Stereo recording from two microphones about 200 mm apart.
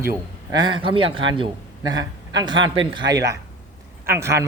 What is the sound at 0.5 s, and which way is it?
A man's voice, 25° right (ahead or behind).